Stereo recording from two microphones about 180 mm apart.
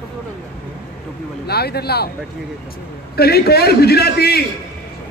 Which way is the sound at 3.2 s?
60° left (ahead or behind).